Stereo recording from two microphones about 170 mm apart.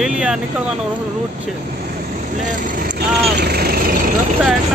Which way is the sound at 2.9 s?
65° right (ahead or behind).